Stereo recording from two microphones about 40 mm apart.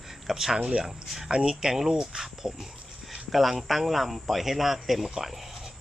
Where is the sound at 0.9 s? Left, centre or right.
Centre.